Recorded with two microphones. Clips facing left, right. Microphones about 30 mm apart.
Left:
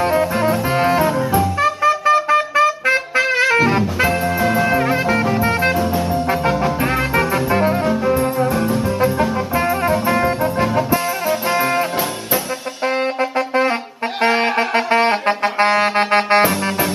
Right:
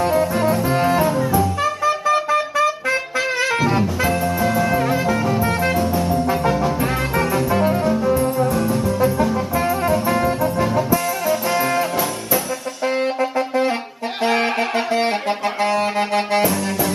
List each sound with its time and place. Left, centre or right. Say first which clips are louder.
0.0 s music: left 1 dB; left
5.8 s music: left 1 dB; centre
6.2 s music: left 1 dB; left
12.8 s brass instrument: left 1 dB; left
13.4 s music: left 3 dB; left
14.7 s saxophone: left 4 dB; left